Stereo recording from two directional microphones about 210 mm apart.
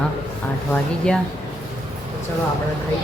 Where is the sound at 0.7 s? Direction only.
5° left (ahead or behind).